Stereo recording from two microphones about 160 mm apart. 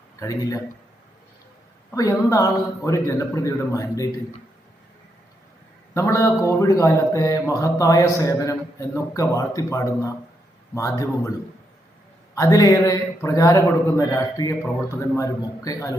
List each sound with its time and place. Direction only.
0.2 s speech: 20° left (ahead or behind)
1.9 s speech: 20° left (ahead or behind)
5.9 s speech: 20° left (ahead or behind)
12.3 s speech: 20° left (ahead or behind)